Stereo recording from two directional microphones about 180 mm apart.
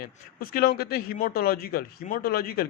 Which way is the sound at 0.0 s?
55° left (ahead or behind).